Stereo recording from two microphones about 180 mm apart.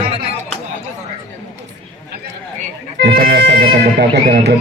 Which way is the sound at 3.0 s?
70° right (ahead or behind).